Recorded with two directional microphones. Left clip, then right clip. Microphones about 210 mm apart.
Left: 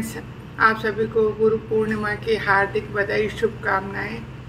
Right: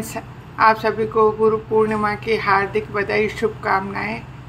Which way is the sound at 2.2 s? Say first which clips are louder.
Even; 30° right (ahead or behind).